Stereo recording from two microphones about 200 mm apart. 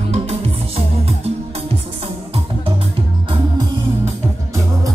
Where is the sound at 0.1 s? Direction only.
30° right (ahead or behind).